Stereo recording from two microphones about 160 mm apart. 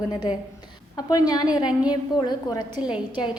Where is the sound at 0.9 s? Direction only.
25° left (ahead or behind).